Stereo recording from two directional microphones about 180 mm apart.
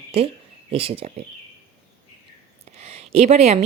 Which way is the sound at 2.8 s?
35° right (ahead or behind).